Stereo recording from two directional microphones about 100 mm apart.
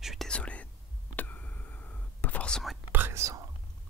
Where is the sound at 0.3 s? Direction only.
10° left (ahead or behind).